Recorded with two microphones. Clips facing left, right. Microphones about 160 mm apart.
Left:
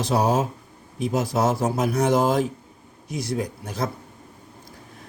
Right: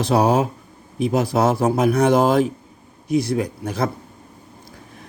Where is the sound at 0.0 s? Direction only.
65° right (ahead or behind).